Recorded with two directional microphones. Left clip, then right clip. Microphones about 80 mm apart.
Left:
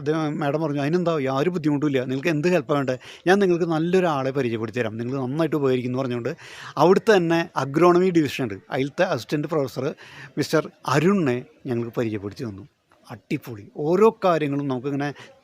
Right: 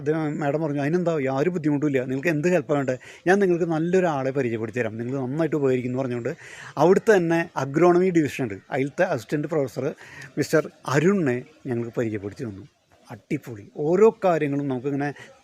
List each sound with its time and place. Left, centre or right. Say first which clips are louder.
0.0 s speech: left 1 dB; left
11.1 s speech: left 1 dB; left